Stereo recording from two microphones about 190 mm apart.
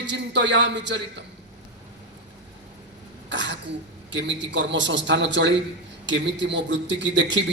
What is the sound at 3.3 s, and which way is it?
Throat clearing, 75° right (ahead or behind).